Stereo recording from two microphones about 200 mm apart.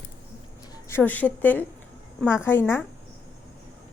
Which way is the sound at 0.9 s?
10° left (ahead or behind).